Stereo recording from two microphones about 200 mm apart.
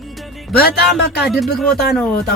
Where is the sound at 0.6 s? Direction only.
50° left (ahead or behind).